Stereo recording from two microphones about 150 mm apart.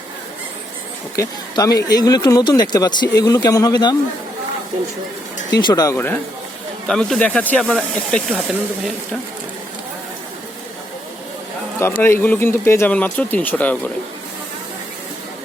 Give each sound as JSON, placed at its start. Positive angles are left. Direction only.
{"t": 1.1, "sound": "speech", "side_deg": 20}
{"t": 5.5, "sound": "speech", "side_deg": 30}
{"t": 6.8, "sound": "speech", "side_deg": 5}
{"t": 11.8, "sound": "speech", "side_deg": 15}